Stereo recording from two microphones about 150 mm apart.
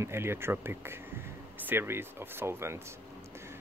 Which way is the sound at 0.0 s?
15° right (ahead or behind).